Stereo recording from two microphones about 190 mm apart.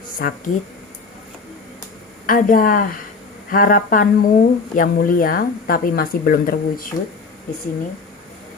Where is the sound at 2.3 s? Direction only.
45° left (ahead or behind).